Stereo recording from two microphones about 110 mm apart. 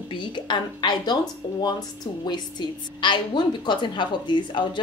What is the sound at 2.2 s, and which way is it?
A woman's voice, 40° left (ahead or behind).